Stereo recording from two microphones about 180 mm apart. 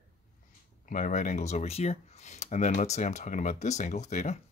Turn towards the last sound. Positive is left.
turn(degrees=40)  # may be behind; listen again after turning